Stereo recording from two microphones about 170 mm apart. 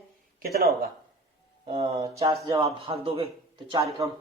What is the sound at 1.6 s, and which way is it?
Speech, 35° right (ahead or behind).